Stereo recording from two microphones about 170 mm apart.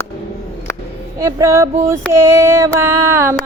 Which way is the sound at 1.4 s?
15° right (ahead or behind).